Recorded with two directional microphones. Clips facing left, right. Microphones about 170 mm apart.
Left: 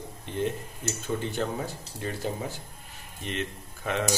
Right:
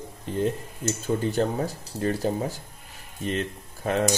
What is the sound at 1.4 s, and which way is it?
Speech, 35° right (ahead or behind).